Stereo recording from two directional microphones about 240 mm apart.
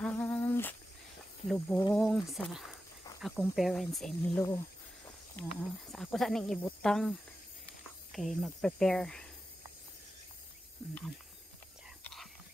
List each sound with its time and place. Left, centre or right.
0.0 s humming: centre
1.5 s speech: centre
4.4 s speech: centre
10.8 s speech: centre
12.0 s whispering: centre